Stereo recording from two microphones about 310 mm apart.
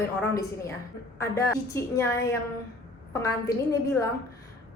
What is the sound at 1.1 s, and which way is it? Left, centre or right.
A woman's voice, centre.